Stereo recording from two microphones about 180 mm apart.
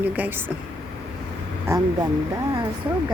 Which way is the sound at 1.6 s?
20° right (ahead or behind).